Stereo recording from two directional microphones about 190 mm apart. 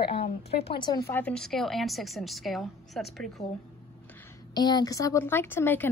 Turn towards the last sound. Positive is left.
turn(degrees=10)  # may be behind; listen again after turning